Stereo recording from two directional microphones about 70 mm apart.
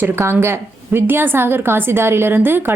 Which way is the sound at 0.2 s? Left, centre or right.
Right.